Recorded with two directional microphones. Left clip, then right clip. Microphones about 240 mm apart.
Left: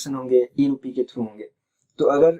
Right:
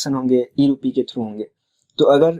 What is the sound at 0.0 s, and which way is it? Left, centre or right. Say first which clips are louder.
Speech: right 1 dB; right.